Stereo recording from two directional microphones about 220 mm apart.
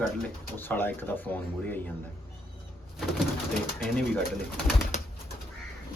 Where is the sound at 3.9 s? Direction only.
5° left (ahead or behind).